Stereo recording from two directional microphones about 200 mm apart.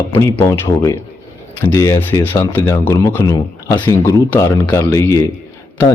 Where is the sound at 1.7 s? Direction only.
15° left (ahead or behind).